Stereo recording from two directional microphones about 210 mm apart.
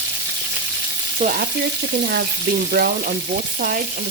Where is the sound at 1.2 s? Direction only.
40° right (ahead or behind).